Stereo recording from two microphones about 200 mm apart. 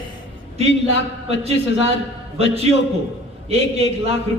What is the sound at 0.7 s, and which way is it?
Speech, 65° left (ahead or behind).